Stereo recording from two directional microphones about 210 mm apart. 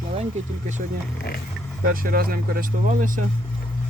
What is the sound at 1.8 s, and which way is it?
Speech, 45° right (ahead or behind).